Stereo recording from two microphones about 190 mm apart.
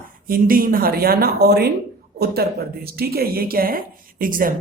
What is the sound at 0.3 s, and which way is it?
Speech, 50° right (ahead or behind).